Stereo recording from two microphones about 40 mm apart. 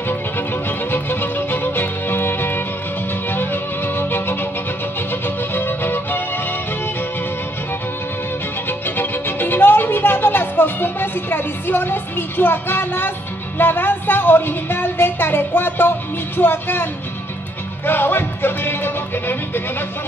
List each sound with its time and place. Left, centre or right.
0.4 s music: left
8.6 s music: left
10.6 s speech: left